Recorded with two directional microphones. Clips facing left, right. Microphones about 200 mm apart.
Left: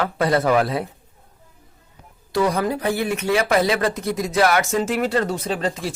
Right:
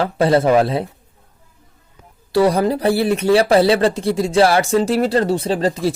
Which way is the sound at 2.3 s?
35° right (ahead or behind).